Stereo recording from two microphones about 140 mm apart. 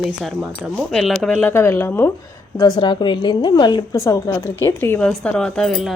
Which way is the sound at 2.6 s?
30° left (ahead or behind).